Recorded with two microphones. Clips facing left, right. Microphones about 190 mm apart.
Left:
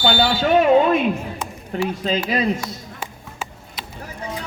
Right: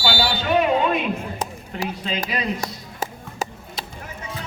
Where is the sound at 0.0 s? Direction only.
50° left (ahead or behind).